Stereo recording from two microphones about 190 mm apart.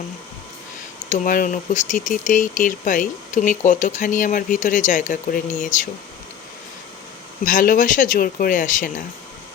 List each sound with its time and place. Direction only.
1.1 s speech: 45° left (ahead or behind)
7.4 s speech: 45° left (ahead or behind)